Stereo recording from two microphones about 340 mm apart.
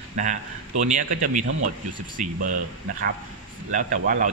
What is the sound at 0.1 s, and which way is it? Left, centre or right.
Speech, right.